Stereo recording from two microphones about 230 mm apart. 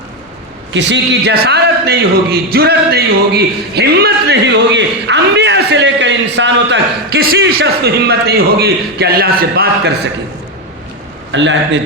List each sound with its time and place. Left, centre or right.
0.7 s a man's voice: right
11.3 s a man's voice: right